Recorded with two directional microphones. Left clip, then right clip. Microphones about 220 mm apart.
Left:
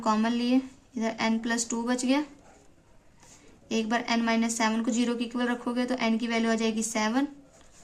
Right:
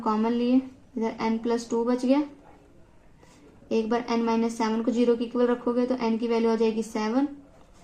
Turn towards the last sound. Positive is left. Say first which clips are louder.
# right 1 dB
turn(degrees=35)  # may be behind; listen again after turning